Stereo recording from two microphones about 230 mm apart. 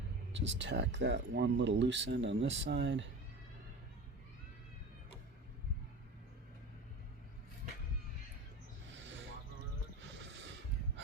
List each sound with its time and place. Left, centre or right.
0.3 s speech: right
9.0 s a sound: right
10.2 s snort: right